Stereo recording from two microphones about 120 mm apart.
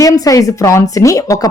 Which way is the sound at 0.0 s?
30° left (ahead or behind).